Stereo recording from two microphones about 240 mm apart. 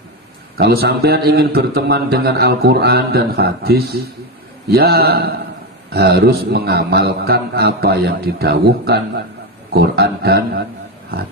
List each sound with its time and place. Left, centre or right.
0.5 s a man's voice: right